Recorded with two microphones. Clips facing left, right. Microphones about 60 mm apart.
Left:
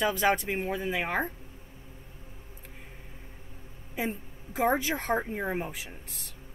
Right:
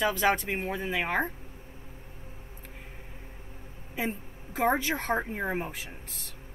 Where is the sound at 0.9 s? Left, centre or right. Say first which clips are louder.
Right 4 dB; centre.